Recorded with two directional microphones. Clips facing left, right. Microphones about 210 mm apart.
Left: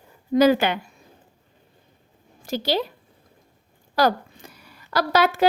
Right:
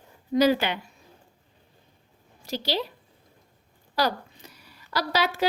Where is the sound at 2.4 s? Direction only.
50° left (ahead or behind).